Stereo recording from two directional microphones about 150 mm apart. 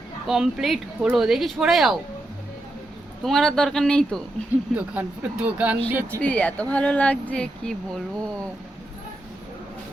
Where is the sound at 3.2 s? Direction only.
Centre (ahead or behind).